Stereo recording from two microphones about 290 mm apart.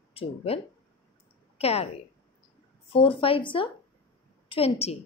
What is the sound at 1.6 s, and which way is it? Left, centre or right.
Speech, left.